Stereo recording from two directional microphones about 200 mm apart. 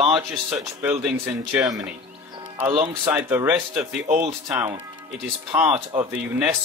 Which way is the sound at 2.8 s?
10° right (ahead or behind).